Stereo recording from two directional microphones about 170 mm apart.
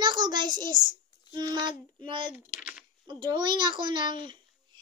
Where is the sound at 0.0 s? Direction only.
25° right (ahead or behind).